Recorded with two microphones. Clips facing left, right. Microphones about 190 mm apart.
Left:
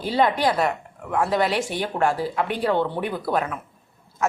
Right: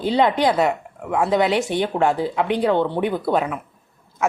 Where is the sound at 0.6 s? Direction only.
10° right (ahead or behind).